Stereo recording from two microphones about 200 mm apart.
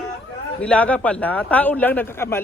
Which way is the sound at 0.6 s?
5° left (ahead or behind).